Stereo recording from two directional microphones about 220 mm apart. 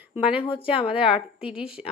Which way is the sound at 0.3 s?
25° left (ahead or behind).